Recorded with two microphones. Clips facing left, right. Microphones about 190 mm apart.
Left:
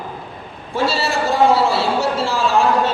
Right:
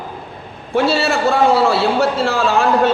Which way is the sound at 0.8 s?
60° right (ahead or behind).